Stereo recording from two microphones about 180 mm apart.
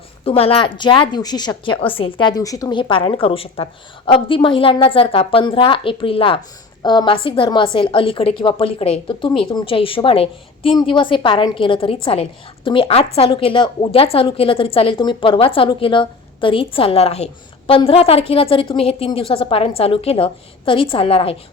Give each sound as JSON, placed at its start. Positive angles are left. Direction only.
{"t": 0.3, "sound": "a woman's voice", "side_deg": 30}